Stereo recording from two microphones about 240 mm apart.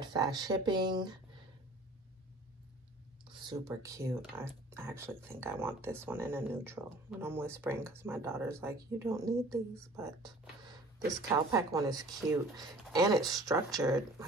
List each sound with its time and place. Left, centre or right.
0.0 s speech: centre
3.3 s speech: centre